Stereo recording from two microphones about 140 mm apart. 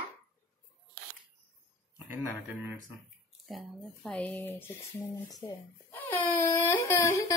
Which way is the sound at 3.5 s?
5° left (ahead or behind).